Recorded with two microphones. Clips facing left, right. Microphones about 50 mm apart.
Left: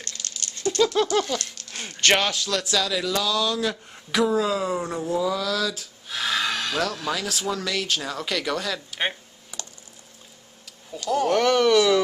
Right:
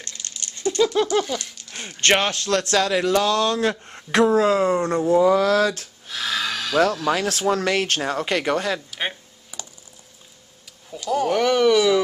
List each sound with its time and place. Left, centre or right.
0.0 s a sound: right
2.0 s speech: right
2.3 s a man's voice: right
6.0 s snort: centre
7.2 s speech: right
9.5 s typing: centre
10.9 s speech: centre